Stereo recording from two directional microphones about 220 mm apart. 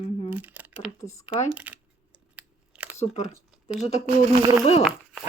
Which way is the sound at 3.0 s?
30° left (ahead or behind).